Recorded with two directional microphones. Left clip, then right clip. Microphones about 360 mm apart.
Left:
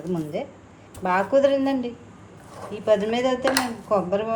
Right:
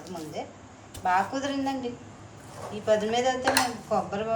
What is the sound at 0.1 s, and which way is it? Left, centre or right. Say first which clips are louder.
A woman's voice: left 6 dB; left.